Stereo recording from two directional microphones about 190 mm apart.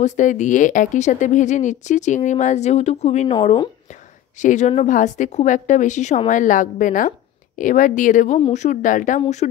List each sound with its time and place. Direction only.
0.0 s a woman's voice: 40° left (ahead or behind)
4.4 s a woman's voice: 40° left (ahead or behind)